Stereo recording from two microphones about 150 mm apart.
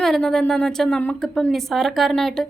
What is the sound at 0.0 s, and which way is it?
A woman's voice, centre (ahead or behind).